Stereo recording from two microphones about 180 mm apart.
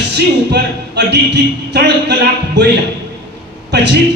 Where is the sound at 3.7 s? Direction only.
70° right (ahead or behind).